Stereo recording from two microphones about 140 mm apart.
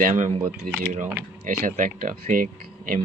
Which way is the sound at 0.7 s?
90° right.